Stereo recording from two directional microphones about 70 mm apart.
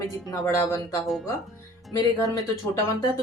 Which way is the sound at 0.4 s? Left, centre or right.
Left.